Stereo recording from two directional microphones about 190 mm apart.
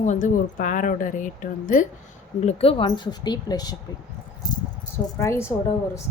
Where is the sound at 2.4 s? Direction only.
30° left (ahead or behind).